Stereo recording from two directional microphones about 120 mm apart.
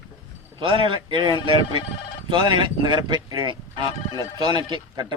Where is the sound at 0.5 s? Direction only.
45° right (ahead or behind).